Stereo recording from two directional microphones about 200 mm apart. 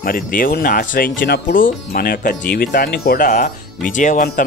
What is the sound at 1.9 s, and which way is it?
Speech, 45° left (ahead or behind).